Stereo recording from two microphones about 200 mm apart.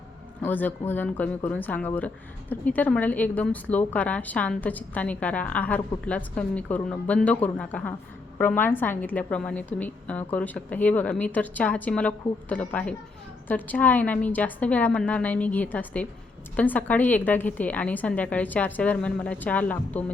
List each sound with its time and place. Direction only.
0.4 s speech: 10° left (ahead or behind)